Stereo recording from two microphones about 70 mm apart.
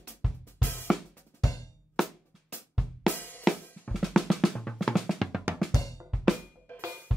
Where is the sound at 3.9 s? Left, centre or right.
Centre.